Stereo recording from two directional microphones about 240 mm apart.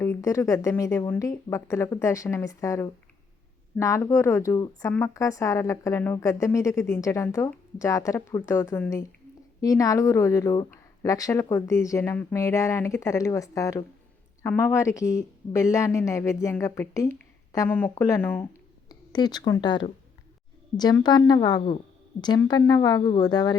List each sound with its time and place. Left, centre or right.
0.0 s speech: centre